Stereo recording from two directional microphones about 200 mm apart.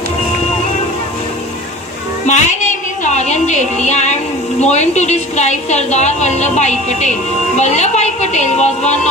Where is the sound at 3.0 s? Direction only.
35° left (ahead or behind).